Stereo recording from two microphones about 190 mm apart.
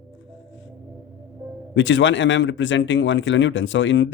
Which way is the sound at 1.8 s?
75° left (ahead or behind).